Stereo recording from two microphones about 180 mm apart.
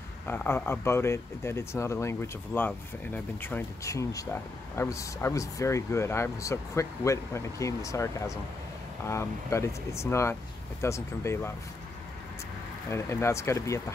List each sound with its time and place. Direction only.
0.3 s speech: 10° left (ahead or behind)
12.9 s speech: 15° left (ahead or behind)